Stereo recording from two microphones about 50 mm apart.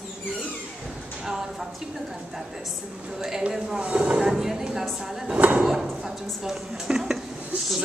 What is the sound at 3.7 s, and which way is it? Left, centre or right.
A woman's voice, right.